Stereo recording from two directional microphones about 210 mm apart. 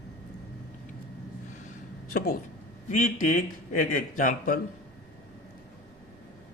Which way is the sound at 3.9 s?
40° left (ahead or behind).